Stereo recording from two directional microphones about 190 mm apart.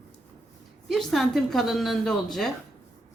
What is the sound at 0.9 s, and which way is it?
A woman's voice, centre (ahead or behind).